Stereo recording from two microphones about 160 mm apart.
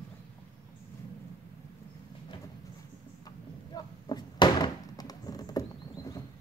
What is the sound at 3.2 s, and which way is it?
Door, 25° left (ahead or behind).